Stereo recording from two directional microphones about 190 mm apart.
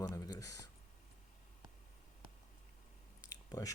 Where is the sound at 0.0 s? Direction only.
20° left (ahead or behind).